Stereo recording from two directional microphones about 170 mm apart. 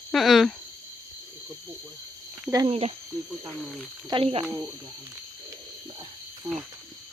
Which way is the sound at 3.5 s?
Centre (ahead or behind).